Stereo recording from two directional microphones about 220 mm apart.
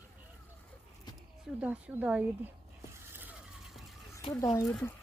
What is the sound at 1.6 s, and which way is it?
Speech, 5° right (ahead or behind).